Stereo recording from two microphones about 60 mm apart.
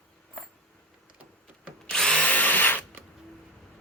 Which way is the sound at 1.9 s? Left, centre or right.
Centre.